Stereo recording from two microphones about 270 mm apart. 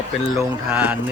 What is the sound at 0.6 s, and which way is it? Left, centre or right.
Speech, centre.